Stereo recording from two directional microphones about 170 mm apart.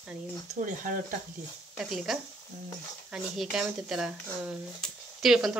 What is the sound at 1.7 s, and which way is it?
Speech, centre (ahead or behind).